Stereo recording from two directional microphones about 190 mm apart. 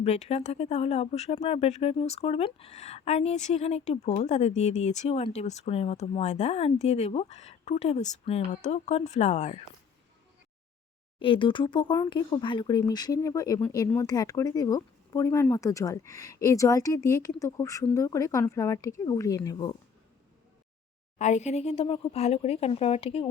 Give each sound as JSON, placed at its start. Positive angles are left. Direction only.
{"t": 0.0, "sound": "speech", "side_deg": 35}
{"t": 11.2, "sound": "speech", "side_deg": 25}
{"t": 21.2, "sound": "speech", "side_deg": 40}